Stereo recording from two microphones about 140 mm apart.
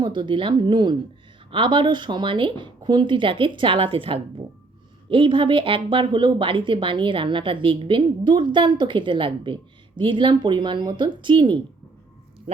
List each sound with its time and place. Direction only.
0.0 s speech: 35° right (ahead or behind)